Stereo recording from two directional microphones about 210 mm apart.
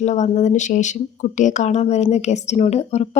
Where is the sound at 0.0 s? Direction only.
35° left (ahead or behind).